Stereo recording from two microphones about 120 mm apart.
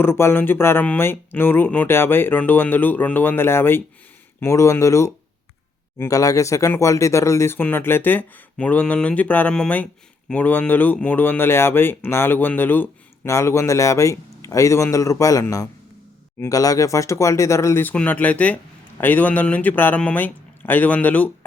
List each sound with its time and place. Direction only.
0.0 s speech: 20° left (ahead or behind)